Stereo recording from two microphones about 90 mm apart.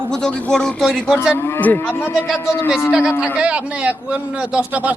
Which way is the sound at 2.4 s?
35° left (ahead or behind).